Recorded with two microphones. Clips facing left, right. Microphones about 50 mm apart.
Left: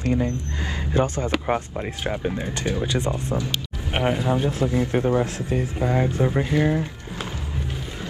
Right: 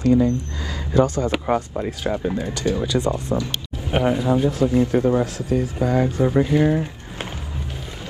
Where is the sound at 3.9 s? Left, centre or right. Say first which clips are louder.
Right 3 dB; left.